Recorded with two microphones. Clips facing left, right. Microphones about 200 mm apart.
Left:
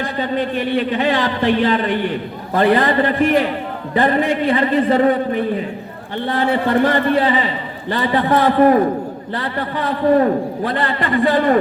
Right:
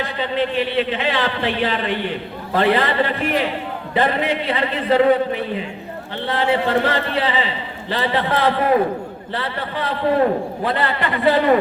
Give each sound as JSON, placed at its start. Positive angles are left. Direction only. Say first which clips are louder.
{"t": 0.0, "sound": "a man's voice", "louder": "left 1 dB", "side_deg": 45}